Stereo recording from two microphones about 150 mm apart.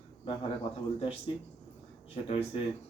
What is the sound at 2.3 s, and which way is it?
Speech, 45° left (ahead or behind).